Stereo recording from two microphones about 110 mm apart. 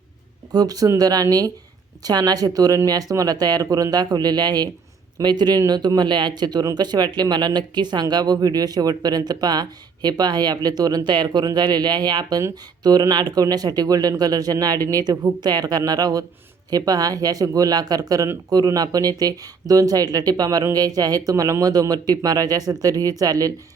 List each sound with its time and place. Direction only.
0.5 s speech: 35° right (ahead or behind)